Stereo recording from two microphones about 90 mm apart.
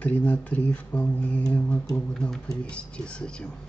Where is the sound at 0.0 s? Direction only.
15° left (ahead or behind).